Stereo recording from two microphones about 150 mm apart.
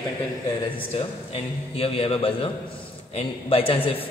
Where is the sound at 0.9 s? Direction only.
40° left (ahead or behind).